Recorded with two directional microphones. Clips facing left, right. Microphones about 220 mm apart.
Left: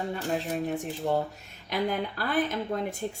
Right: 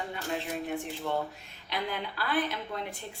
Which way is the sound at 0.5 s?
40° left (ahead or behind).